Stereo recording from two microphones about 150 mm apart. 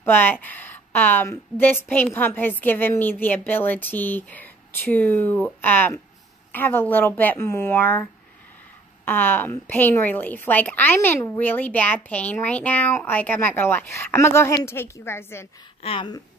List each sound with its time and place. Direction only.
0.0 s a woman's voice: 15° left (ahead or behind)
15.8 s a woman's voice: 40° left (ahead or behind)